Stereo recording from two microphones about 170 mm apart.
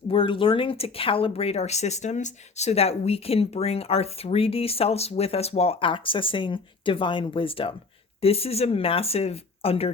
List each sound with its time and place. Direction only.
0.1 s speech: 30° left (ahead or behind)